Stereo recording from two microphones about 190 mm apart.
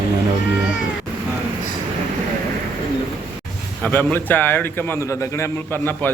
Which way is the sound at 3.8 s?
10° left (ahead or behind).